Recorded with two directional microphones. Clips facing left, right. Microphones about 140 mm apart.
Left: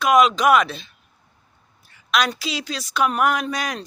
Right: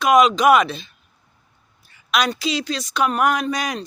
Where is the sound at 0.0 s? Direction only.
Centre (ahead or behind).